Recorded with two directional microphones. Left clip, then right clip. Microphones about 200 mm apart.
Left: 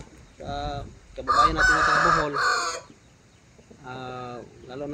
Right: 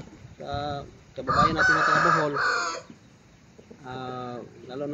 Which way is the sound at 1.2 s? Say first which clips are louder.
Left 2 dB; 45° left (ahead or behind).